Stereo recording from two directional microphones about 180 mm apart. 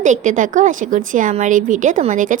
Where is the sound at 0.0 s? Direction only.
45° right (ahead or behind).